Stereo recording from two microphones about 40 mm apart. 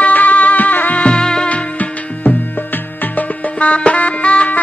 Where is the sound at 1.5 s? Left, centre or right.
Left.